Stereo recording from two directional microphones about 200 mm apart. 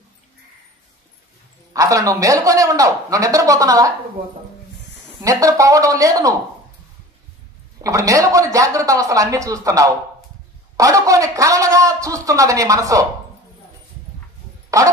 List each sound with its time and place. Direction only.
1.7 s a man's voice: 15° right (ahead or behind)
5.2 s a man's voice: 15° right (ahead or behind)
7.8 s a man's voice: 15° right (ahead or behind)
14.8 s a man's voice: 15° right (ahead or behind)